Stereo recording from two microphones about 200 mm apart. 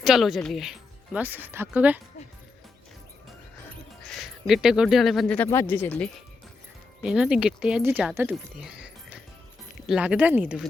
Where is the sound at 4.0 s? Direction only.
Centre (ahead or behind).